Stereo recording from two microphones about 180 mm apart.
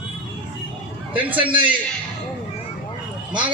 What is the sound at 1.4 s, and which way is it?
Speech, 30° right (ahead or behind).